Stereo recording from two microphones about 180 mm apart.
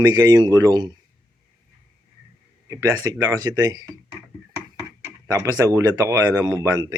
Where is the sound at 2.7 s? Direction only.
20° right (ahead or behind).